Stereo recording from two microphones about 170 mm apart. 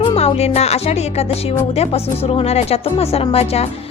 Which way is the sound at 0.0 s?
35° left (ahead or behind).